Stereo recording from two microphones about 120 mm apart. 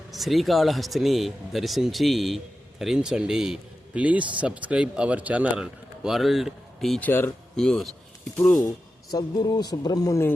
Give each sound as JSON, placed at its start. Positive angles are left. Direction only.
{"t": 0.1, "sound": "a man's voice", "side_deg": 0}
{"t": 7.0, "sound": "speech", "side_deg": 20}
{"t": 7.5, "sound": "speech", "side_deg": 5}
{"t": 9.1, "sound": "a man's voice", "side_deg": 35}